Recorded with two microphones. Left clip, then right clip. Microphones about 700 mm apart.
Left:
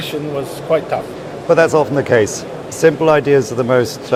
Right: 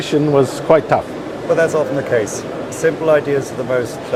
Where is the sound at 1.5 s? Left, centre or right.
Left.